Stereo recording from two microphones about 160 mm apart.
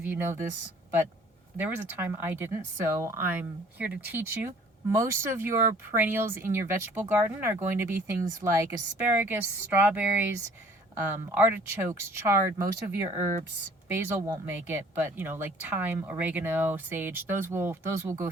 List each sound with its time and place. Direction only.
0.0 s speech: 10° right (ahead or behind)
1.5 s speech: 10° right (ahead or behind)